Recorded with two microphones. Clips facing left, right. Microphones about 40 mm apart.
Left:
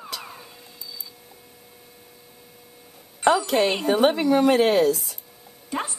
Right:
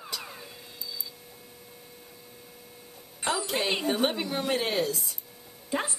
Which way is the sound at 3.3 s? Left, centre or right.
Left.